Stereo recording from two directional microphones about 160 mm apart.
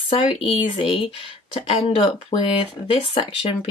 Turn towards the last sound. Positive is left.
turn(degrees=35)  # may be behind; listen again after turning